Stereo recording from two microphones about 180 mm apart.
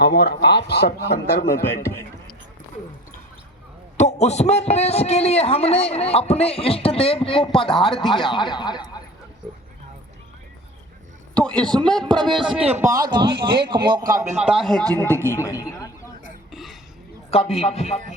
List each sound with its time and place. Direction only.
0.0 s a man's voice: 65° left (ahead or behind)
1.6 s a man's voice: 15° left (ahead or behind)
3.9 s a man's voice: 40° left (ahead or behind); by 9.0 s 25° left (ahead or behind)
11.3 s speech: 5° left (ahead or behind)
12.7 s speech: 15° right (ahead or behind)
14.4 s speech: centre (ahead or behind)
15.3 s a man's voice: 15° left (ahead or behind)
16.5 s a sound: centre (ahead or behind)
17.3 s a man's voice: 35° left (ahead or behind)